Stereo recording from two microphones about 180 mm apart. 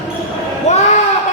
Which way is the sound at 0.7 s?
40° left (ahead or behind).